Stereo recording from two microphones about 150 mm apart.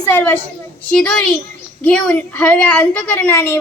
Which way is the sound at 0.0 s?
15° left (ahead or behind).